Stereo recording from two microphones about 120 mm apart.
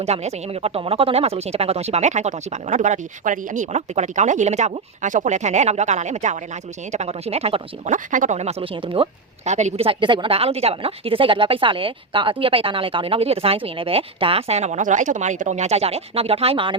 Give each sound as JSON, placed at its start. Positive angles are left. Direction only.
{"t": 0.0, "sound": "speech", "side_deg": -65}
{"t": 6.9, "sound": "speech", "side_deg": -65}
{"t": 9.8, "sound": "speech", "side_deg": -45}